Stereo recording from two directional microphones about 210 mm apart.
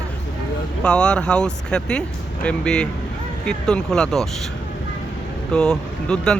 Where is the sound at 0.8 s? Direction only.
5° left (ahead or behind).